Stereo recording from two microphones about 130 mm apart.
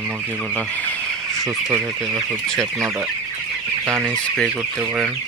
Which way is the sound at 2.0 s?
5° left (ahead or behind).